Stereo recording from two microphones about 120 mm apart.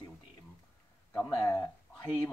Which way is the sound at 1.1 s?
15° left (ahead or behind).